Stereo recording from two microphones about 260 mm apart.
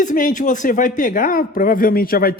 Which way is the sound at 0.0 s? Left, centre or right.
Left.